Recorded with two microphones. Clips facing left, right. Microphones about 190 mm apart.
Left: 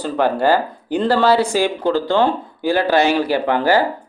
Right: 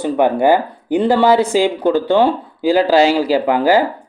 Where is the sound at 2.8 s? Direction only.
90° right.